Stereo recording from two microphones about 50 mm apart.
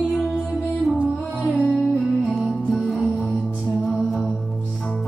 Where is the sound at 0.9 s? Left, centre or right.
Right.